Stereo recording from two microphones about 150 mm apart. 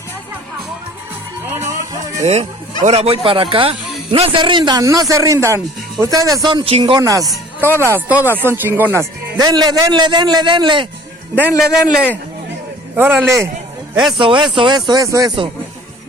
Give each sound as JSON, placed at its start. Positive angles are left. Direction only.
{"t": 1.5, "sound": "music", "side_deg": -15}
{"t": 2.2, "sound": "speech", "side_deg": -45}
{"t": 7.0, "sound": "a man's voice", "side_deg": -25}
{"t": 11.3, "sound": "a man's voice", "side_deg": -5}
{"t": 14.2, "sound": "speech", "side_deg": -35}